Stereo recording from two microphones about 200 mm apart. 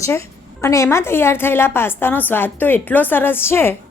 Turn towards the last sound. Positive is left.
turn(degrees=10)  # may be behind; listen again after turning